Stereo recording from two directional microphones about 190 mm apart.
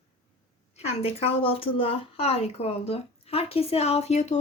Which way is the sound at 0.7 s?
35° left (ahead or behind).